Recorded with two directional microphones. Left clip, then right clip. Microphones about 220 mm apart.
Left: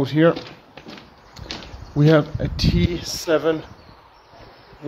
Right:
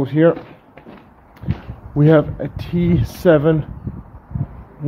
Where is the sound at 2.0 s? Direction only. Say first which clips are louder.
Right 3 dB; 15° right (ahead or behind).